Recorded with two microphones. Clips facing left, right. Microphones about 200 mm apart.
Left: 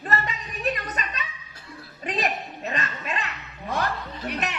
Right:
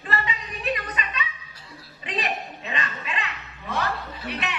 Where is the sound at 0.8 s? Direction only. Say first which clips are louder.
Right 1 dB; 45° left (ahead or behind).